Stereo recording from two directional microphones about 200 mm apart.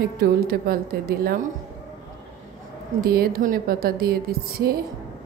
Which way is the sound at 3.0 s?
50° right (ahead or behind).